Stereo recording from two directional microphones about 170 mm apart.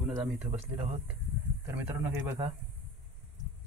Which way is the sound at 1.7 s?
10° right (ahead or behind).